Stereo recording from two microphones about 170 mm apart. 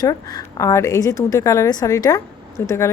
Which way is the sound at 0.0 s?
25° left (ahead or behind).